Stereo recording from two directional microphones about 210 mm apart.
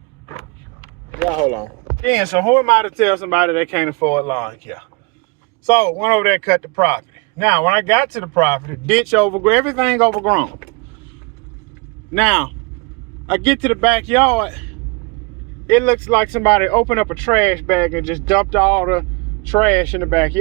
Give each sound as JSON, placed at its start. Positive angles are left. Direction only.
{"t": 2.4, "sound": "speech", "side_deg": 10}
{"t": 3.0, "sound": "speech", "side_deg": -10}
{"t": 3.8, "sound": "speech", "side_deg": 15}
{"t": 5.6, "sound": "speech", "side_deg": 15}
{"t": 8.9, "sound": "speech", "side_deg": 0}
{"t": 12.1, "sound": "speech", "side_deg": 0}
{"t": 15.6, "sound": "speech", "side_deg": 10}